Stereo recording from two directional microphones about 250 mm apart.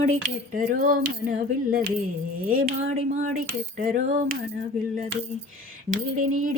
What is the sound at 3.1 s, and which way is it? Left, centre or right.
Speech, right.